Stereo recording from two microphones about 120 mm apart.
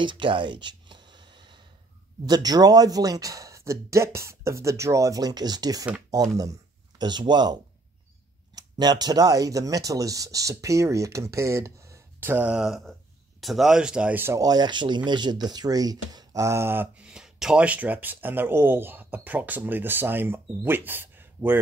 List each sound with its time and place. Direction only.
0.0 s a sound: 45° right (ahead or behind)
2.2 s speech: 35° right (ahead or behind); by 14.4 s 15° right (ahead or behind)
14.4 s speech: 35° right (ahead or behind); by 21.5 s 15° right (ahead or behind)